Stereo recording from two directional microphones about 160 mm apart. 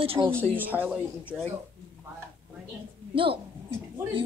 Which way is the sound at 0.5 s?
10° right (ahead or behind).